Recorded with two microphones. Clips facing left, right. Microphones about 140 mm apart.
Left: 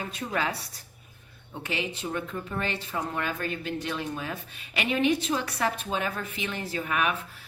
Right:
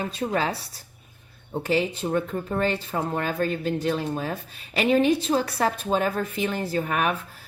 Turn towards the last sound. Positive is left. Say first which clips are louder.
# right 4 dB
turn(degrees=-40)  # may be behind; listen again after turning